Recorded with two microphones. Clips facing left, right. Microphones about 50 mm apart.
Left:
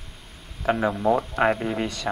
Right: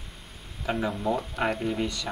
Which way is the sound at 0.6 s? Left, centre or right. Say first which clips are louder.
Left 6 dB; left.